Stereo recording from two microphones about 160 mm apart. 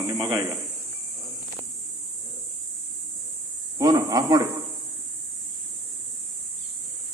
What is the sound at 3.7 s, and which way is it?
Speech, 25° right (ahead or behind).